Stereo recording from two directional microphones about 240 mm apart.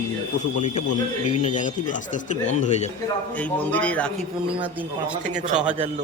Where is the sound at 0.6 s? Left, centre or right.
Left.